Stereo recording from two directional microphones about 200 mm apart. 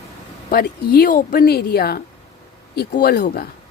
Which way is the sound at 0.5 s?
50° left (ahead or behind).